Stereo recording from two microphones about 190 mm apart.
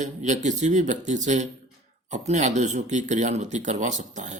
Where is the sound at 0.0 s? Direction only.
40° right (ahead or behind).